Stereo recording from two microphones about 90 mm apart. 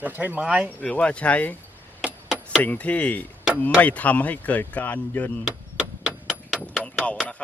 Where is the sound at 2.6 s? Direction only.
15° left (ahead or behind).